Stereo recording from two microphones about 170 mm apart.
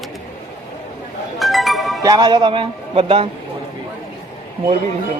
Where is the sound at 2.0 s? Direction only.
20° right (ahead or behind).